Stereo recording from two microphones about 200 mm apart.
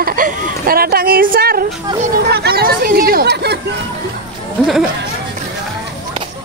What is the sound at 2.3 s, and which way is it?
Chatter, 55° right (ahead or behind).